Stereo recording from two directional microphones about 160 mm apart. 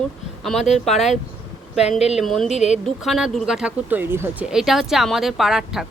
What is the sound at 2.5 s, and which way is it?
Speech, 45° left (ahead or behind).